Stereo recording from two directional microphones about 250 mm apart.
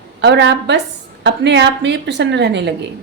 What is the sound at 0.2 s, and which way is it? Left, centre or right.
A woman's voice, right.